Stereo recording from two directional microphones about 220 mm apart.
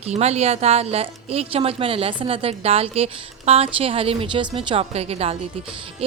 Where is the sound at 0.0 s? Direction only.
30° right (ahead or behind).